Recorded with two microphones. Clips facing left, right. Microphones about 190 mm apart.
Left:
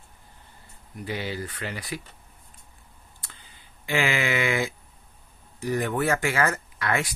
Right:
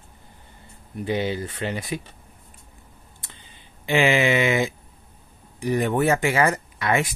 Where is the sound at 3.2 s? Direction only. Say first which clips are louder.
Right 3 dB; 20° right (ahead or behind).